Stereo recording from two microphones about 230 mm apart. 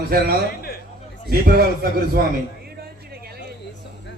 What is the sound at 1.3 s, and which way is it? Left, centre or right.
Speech, right.